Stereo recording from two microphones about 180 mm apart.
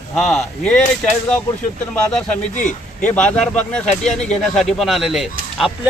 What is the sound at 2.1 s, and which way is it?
Speech, 5° left (ahead or behind).